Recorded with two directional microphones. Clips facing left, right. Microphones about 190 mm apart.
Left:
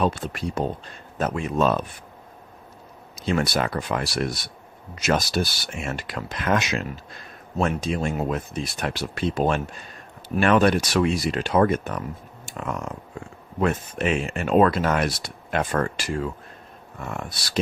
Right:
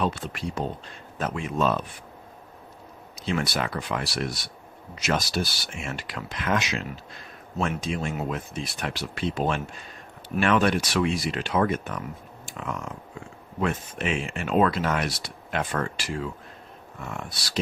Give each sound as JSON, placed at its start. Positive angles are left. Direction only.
{"t": 0.0, "sound": "speech", "side_deg": 40}
{"t": 3.2, "sound": "speech", "side_deg": 45}